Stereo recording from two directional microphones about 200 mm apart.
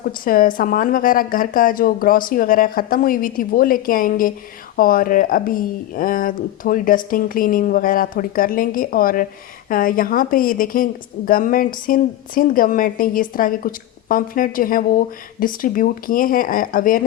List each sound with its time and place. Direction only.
0.0 s a woman's voice: 45° left (ahead or behind)